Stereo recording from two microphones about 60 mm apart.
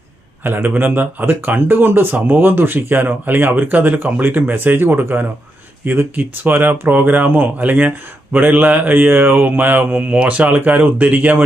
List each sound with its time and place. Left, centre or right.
0.4 s speech: right
10.2 s speech: right
10.5 s speech: right